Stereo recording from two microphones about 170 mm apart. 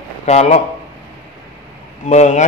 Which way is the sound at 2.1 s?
45° left (ahead or behind).